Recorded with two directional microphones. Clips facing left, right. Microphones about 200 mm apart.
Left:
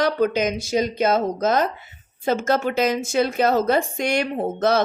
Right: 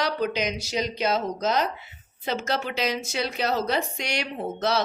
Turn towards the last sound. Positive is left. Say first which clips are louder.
# left 6 dB
turn(degrees=50)  # may be behind; listen again after turning